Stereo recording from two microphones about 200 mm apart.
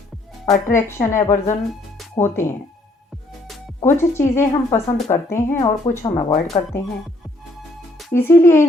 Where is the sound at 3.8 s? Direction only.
10° left (ahead or behind).